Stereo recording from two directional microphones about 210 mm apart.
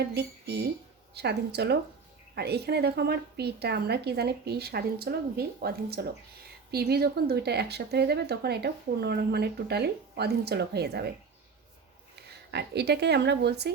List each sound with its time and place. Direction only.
0.0 s speech: 50° right (ahead or behind)
12.1 s speech: 50° right (ahead or behind)